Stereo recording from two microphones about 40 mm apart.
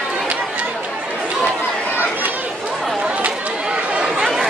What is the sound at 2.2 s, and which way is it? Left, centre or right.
Chatter, right.